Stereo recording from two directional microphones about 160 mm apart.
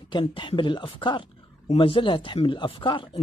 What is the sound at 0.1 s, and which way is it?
Speech, 30° left (ahead or behind).